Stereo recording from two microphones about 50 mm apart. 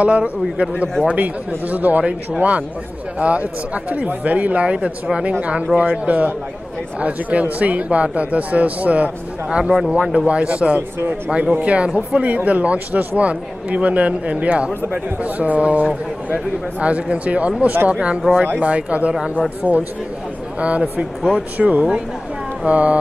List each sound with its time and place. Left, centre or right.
0.0 s a man's voice: right
3.2 s a man's voice: right
9.7 s speech: centre
10.2 s a man's voice: right